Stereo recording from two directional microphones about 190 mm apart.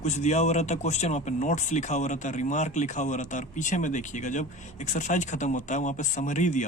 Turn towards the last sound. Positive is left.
turn(degrees=40)  # may be behind; listen again after turning